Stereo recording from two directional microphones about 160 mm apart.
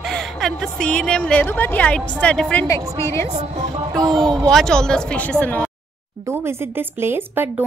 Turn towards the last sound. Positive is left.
turn(degrees=-15)  # may be behind; listen again after turning